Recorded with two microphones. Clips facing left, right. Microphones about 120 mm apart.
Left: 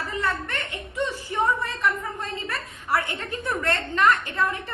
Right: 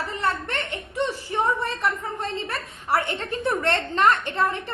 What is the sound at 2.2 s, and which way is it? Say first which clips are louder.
A woman's voice: right 2 dB; 30° right (ahead or behind).